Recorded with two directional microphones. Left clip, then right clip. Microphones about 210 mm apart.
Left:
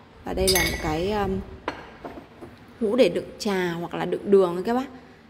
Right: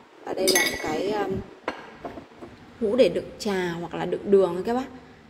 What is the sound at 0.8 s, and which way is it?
Speech, 10° left (ahead or behind).